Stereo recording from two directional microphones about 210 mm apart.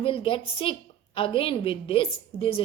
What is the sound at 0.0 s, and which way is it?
A woman's voice, 25° left (ahead or behind).